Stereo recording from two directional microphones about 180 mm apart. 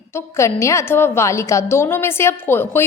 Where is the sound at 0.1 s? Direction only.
15° left (ahead or behind).